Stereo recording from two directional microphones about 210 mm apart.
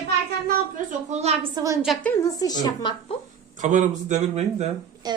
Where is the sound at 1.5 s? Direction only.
15° right (ahead or behind).